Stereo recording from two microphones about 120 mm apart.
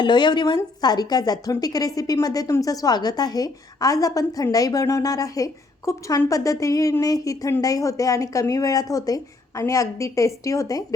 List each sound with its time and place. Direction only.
0.0 s a woman's voice: 40° left (ahead or behind)